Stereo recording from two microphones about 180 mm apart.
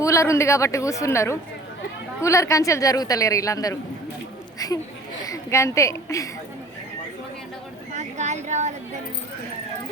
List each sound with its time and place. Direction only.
0.0 s a woman's voice: 15° left (ahead or behind)
4.6 s a sound: 20° left (ahead or behind)
5.2 s a woman's voice: 15° left (ahead or behind)
7.9 s speech: 40° right (ahead or behind)